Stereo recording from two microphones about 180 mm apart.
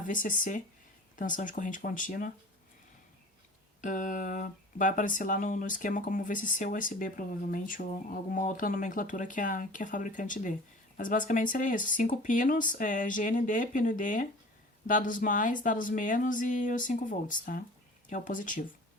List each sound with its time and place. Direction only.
0.1 s speech: 50° left (ahead or behind)
3.8 s speech: 45° left (ahead or behind)